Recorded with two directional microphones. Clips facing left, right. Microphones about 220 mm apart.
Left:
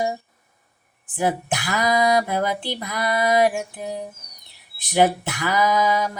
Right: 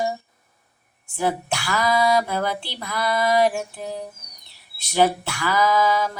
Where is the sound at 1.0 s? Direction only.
15° left (ahead or behind).